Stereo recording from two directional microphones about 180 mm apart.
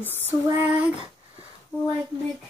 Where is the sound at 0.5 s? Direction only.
20° right (ahead or behind).